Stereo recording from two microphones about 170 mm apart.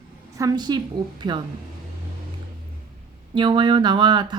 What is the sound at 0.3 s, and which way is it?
Speech, 20° right (ahead or behind).